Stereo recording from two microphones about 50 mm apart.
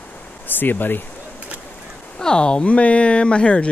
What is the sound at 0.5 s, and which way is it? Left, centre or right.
Speech, left.